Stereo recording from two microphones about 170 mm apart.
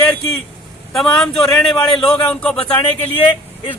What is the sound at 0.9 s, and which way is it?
A man's voice, centre (ahead or behind).